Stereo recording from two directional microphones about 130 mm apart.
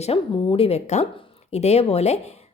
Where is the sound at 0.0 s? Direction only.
50° left (ahead or behind).